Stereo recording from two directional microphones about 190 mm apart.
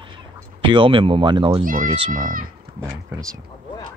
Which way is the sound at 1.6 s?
45° right (ahead or behind).